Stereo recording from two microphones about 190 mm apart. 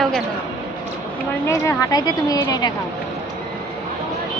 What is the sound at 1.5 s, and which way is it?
A man's voice, 15° left (ahead or behind).